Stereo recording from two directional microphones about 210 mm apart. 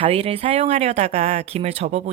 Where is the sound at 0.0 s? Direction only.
25° right (ahead or behind).